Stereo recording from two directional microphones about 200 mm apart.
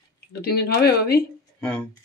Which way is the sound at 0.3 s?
55° left (ahead or behind).